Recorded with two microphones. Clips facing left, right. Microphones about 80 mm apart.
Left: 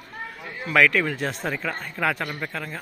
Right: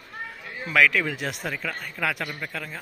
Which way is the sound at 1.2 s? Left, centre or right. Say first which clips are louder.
Left 3 dB; centre.